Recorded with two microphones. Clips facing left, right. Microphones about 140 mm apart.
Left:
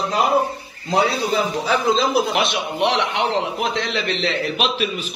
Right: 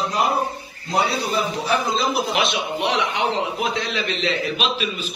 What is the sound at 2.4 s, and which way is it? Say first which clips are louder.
A man's voice: left 2 dB; 65° left (ahead or behind).